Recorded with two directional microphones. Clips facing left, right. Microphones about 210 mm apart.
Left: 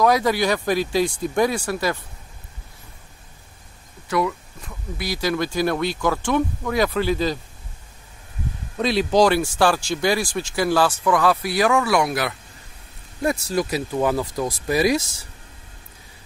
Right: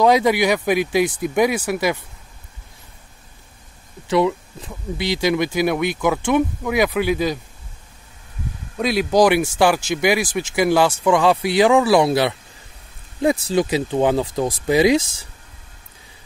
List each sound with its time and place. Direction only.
0.0 s speech: 20° right (ahead or behind)
4.1 s speech: 25° right (ahead or behind)
8.7 s speech: 10° right (ahead or behind)